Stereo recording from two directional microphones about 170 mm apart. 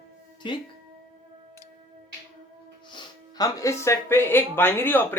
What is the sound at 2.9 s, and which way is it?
Speech, 20° left (ahead or behind).